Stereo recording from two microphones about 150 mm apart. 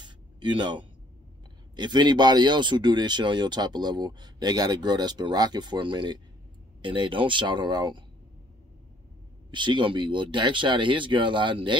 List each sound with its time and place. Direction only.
0.0 s a sound: 30° right (ahead or behind)
1.8 s speech: 30° right (ahead or behind)
9.5 s speech: 30° right (ahead or behind)